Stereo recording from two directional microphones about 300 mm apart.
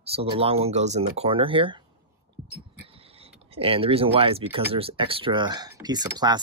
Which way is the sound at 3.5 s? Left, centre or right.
Centre.